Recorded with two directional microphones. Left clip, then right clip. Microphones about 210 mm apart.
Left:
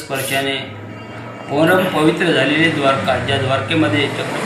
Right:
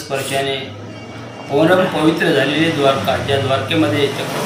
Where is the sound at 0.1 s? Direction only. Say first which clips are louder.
Even; centre (ahead or behind).